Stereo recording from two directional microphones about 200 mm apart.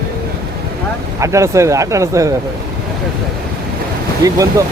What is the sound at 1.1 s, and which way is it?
Speech, 15° right (ahead or behind).